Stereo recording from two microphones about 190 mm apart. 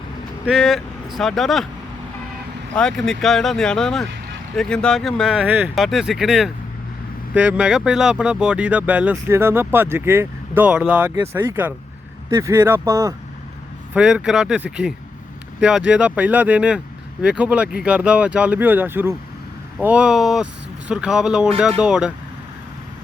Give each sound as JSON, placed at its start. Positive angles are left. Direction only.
{"t": 0.4, "sound": "speech", "side_deg": 0}
{"t": 2.7, "sound": "speech", "side_deg": 5}
{"t": 13.9, "sound": "speech", "side_deg": -5}